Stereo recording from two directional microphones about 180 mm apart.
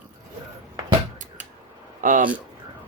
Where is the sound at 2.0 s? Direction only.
45° right (ahead or behind).